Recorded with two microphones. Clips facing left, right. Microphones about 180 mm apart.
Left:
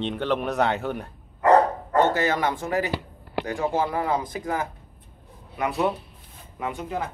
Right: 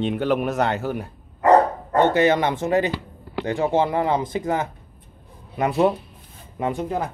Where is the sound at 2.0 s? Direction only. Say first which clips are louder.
Right 4 dB; 20° right (ahead or behind).